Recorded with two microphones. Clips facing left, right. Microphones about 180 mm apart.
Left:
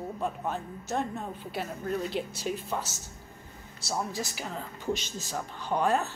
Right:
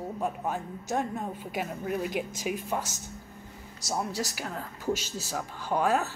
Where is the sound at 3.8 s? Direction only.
45° right (ahead or behind).